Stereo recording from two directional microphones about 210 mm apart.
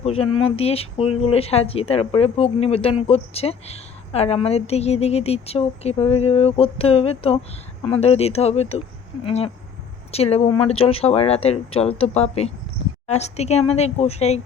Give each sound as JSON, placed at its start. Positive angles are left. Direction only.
{"t": 0.0, "sound": "a woman's voice", "side_deg": 30}